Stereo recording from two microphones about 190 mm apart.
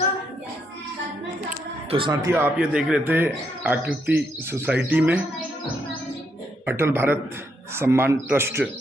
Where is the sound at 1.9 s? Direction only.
25° right (ahead or behind).